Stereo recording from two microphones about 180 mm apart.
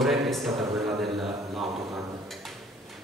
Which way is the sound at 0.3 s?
Centre (ahead or behind).